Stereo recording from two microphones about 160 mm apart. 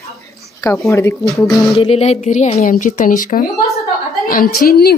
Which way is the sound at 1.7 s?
35° left (ahead or behind).